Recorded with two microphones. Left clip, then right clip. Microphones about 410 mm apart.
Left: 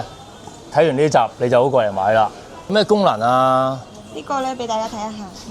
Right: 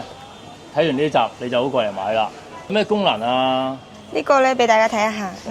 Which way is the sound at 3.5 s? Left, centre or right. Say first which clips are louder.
Left 4 dB; left.